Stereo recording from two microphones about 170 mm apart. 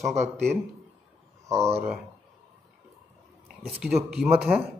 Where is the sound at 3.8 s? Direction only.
Centre (ahead or behind).